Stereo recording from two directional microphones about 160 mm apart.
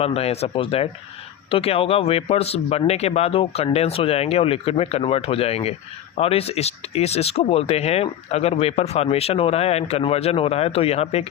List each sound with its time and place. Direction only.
0.0 s speech: 40° left (ahead or behind)